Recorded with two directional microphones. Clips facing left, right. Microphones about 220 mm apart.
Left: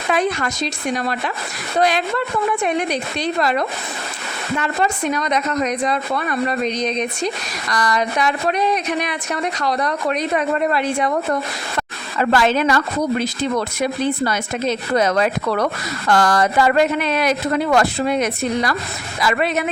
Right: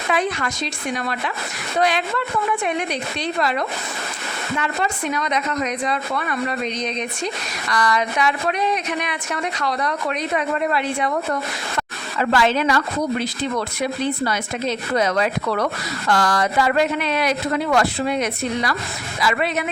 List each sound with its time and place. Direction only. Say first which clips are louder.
0.1 s speech: left 3 dB; 40° left (ahead or behind)
7.7 s speech: left 1 dB; 40° left (ahead or behind)